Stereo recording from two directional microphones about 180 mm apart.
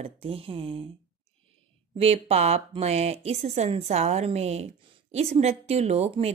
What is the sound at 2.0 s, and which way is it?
Speech, 35° right (ahead or behind).